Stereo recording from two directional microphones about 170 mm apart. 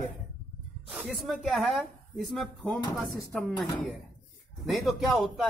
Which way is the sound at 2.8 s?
25° left (ahead or behind).